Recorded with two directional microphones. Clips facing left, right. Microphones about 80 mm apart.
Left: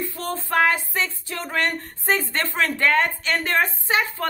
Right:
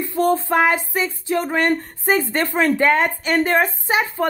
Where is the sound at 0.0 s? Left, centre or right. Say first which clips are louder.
Right 10 dB; right.